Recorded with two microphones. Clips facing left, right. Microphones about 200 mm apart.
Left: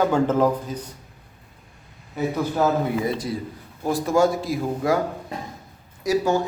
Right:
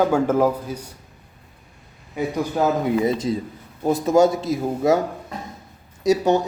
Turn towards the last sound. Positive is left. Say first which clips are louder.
# right 3 dB
turn(degrees=-20)  # may be behind; listen again after turning